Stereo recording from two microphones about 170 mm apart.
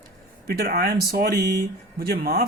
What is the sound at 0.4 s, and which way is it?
Speech, 65° right (ahead or behind).